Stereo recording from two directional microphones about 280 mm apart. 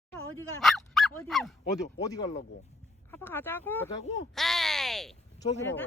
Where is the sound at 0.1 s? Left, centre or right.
Centre.